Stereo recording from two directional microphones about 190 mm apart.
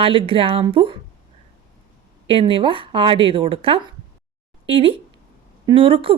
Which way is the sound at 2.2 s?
30° right (ahead or behind).